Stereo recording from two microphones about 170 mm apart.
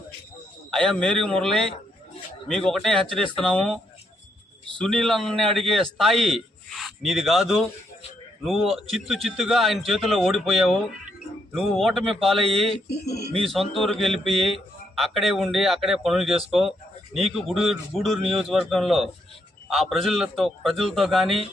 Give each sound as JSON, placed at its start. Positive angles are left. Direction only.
{"t": 0.7, "sound": "a man's voice", "side_deg": 5}
{"t": 4.8, "sound": "a man's voice", "side_deg": 0}
{"t": 12.9, "sound": "speech", "side_deg": 70}
{"t": 13.5, "sound": "a man's voice", "side_deg": 0}